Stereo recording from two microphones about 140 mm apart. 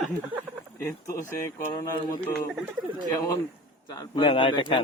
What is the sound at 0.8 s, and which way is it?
A man's voice, 15° left (ahead or behind).